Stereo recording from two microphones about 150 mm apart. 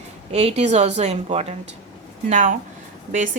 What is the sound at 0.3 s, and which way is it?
Speech, 45° right (ahead or behind).